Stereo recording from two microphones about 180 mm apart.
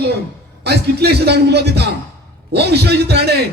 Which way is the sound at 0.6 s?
65° right (ahead or behind).